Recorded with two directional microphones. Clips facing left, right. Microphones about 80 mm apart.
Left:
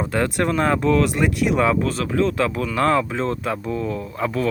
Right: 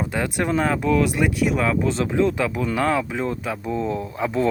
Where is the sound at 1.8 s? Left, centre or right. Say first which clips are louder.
Right 1 dB; centre.